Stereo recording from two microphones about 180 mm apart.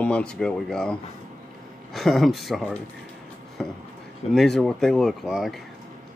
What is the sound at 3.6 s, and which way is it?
Chopping, centre (ahead or behind).